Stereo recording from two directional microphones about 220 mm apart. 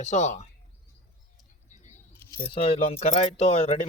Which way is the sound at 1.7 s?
35° left (ahead or behind).